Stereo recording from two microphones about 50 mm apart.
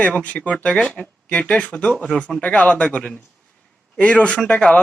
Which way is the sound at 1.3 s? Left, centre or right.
Left.